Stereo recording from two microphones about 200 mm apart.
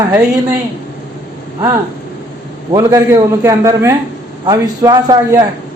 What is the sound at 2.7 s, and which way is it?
A man's voice, 15° right (ahead or behind).